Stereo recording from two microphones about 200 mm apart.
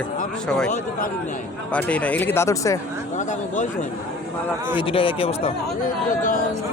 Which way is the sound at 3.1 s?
40° left (ahead or behind).